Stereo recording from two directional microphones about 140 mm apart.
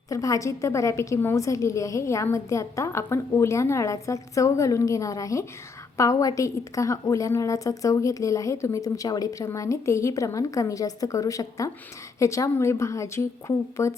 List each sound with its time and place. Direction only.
0.1 s a woman's voice: 25° left (ahead or behind)